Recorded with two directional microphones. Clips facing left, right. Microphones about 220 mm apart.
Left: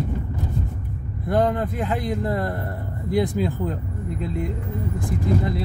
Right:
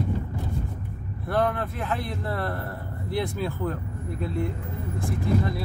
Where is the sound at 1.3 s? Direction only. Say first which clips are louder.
Left 4 dB; 15° left (ahead or behind).